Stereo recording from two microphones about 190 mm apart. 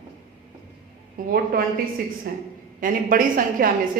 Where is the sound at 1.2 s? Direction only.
50° right (ahead or behind).